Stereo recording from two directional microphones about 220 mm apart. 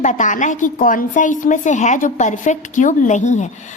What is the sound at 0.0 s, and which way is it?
A woman's voice, 35° left (ahead or behind).